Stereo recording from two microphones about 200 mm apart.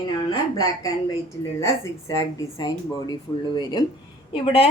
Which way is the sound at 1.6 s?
15° left (ahead or behind).